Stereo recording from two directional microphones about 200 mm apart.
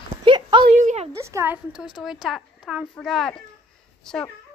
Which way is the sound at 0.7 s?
35° right (ahead or behind).